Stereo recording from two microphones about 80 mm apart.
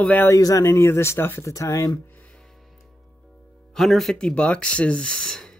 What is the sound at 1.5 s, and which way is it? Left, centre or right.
Speech, left.